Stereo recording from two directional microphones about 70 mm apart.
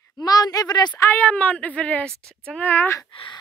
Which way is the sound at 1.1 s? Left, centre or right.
Left.